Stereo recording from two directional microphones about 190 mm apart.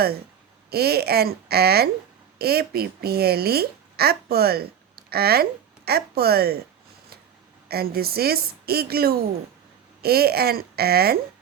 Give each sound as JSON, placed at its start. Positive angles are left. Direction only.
{"t": 0.7, "sound": "a child's voice", "side_deg": -55}
{"t": 7.7, "sound": "a woman's voice", "side_deg": -55}